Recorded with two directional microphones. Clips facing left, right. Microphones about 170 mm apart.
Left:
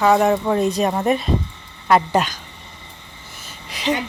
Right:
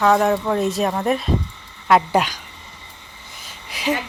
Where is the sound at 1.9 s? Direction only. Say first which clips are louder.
Even; 10° right (ahead or behind).